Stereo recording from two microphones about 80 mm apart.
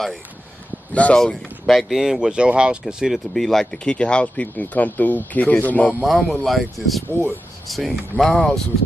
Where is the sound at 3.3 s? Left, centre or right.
Centre.